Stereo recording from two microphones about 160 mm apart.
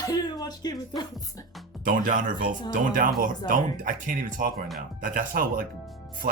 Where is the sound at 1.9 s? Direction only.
55° right (ahead or behind).